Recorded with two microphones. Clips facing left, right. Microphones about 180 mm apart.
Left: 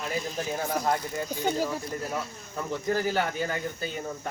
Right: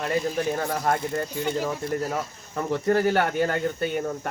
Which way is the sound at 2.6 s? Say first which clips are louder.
Right 6 dB; 65° right (ahead or behind).